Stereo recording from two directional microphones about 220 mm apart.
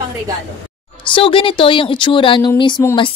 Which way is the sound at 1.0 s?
25° left (ahead or behind).